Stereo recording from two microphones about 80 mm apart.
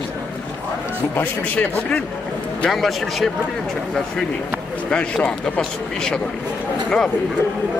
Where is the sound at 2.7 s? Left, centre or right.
Centre.